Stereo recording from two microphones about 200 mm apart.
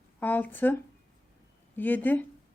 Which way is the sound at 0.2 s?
10° left (ahead or behind).